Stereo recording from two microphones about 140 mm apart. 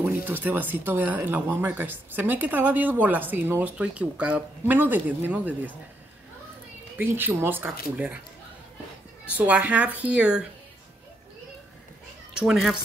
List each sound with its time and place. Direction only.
0.0 s speech: 15° right (ahead or behind)
7.0 s speech: 15° right (ahead or behind)
9.4 s speech: 10° right (ahead or behind)
12.4 s speech: 5° right (ahead or behind)